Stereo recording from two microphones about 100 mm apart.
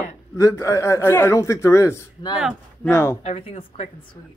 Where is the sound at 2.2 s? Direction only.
45° left (ahead or behind).